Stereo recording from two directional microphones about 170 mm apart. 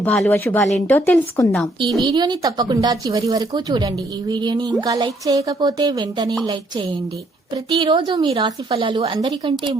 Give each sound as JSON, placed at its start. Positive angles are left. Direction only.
{"t": 0.0, "sound": "a woman's voice", "side_deg": 5}
{"t": 2.0, "sound": "speech", "side_deg": -25}